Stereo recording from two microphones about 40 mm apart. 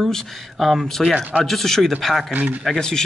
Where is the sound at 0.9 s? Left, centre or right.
Centre.